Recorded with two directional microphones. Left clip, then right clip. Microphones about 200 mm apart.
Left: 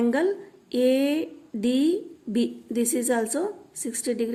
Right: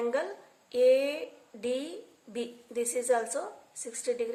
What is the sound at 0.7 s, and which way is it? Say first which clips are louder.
Speech: left 2 dB; 45° left (ahead or behind).